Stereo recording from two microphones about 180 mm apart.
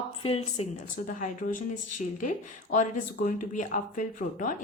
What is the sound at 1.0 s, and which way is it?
Speech, 45° left (ahead or behind).